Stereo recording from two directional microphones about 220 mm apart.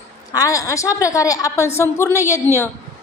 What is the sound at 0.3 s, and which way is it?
A woman's voice, 15° left (ahead or behind).